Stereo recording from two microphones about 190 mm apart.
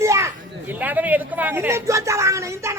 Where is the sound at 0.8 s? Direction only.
10° right (ahead or behind).